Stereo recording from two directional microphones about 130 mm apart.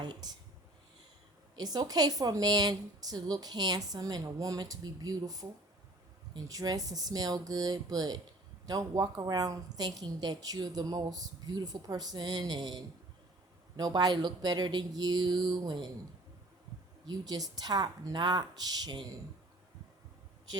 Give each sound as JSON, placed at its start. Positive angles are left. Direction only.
{"t": 0.0, "sound": "speech", "side_deg": -30}
{"t": 1.5, "sound": "a woman's voice", "side_deg": -30}
{"t": 17.1, "sound": "a woman's voice", "side_deg": -30}